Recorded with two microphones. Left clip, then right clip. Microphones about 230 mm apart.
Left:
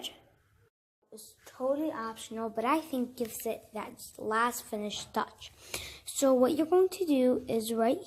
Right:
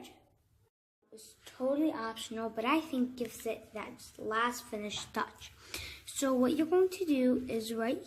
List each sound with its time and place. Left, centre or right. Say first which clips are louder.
1.1 s speech: left 2 dB; centre